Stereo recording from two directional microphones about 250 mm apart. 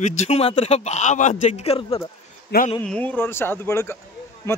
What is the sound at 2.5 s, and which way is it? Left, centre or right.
Speech, left.